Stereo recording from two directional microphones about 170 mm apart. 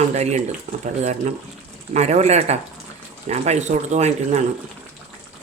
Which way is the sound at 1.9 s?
40° right (ahead or behind).